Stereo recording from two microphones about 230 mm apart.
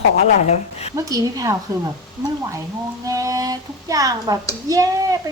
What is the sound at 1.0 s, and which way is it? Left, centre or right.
Speech, centre.